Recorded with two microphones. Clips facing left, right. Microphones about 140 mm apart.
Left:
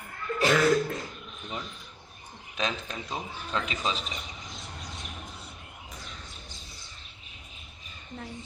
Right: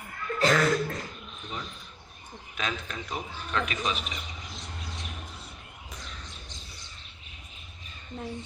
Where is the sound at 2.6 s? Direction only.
25° left (ahead or behind).